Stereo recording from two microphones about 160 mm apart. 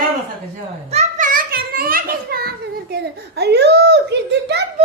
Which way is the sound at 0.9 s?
45° right (ahead or behind).